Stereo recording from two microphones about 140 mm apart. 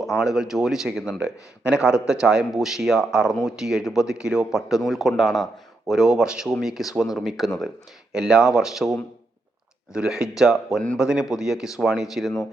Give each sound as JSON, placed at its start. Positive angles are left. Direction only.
{"t": 0.2, "sound": "speech", "side_deg": -5}